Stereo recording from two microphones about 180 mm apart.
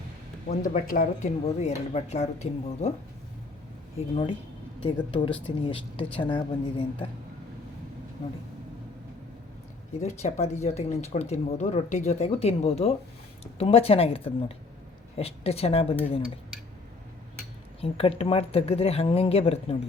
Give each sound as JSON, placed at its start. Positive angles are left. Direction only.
{"t": 0.6, "sound": "speech", "side_deg": 45}
{"t": 4.1, "sound": "speech", "side_deg": 25}
{"t": 10.0, "sound": "speech", "side_deg": 40}
{"t": 17.7, "sound": "speech", "side_deg": 30}